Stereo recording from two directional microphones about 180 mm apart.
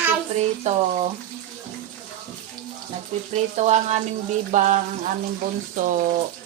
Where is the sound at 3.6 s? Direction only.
40° right (ahead or behind).